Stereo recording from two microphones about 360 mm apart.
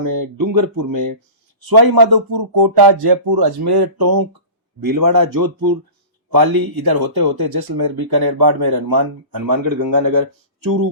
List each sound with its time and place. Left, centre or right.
0.1 s speech: right
6.3 s speech: right